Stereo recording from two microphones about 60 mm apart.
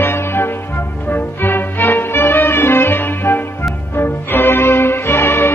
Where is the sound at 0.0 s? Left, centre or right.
Left.